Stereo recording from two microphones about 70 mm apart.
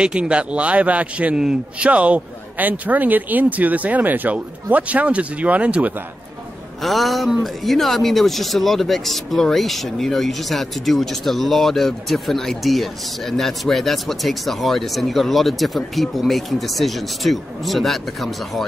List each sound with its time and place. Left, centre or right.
0.0 s a man's voice: centre
6.8 s speech: centre